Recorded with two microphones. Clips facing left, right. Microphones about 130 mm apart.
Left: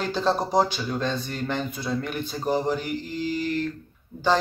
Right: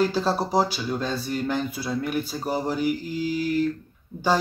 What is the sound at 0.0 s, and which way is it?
A man's voice, 5° right (ahead or behind).